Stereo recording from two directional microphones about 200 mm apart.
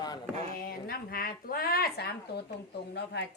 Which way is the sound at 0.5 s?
50° left (ahead or behind).